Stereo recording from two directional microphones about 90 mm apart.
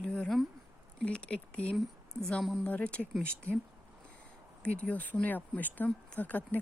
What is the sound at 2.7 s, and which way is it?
Speech, 15° left (ahead or behind).